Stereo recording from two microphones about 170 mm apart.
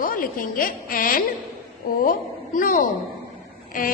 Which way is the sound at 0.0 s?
55° left (ahead or behind).